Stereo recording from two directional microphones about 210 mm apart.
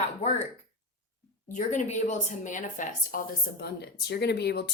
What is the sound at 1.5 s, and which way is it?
A woman's voice, 35° left (ahead or behind).